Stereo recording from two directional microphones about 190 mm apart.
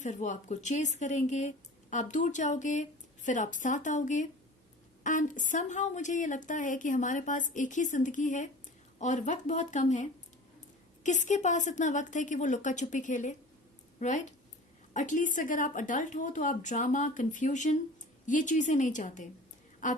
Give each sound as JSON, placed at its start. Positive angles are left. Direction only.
{"t": 0.0, "sound": "a woman's voice", "side_deg": 40}